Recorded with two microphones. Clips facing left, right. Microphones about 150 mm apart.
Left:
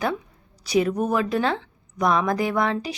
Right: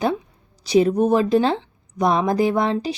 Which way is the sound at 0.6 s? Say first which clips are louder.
Right 5 dB; 25° right (ahead or behind).